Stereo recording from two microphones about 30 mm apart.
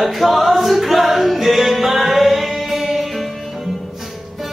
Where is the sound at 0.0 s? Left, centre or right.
Centre.